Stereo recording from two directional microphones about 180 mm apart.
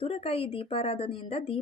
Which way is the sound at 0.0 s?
35° left (ahead or behind).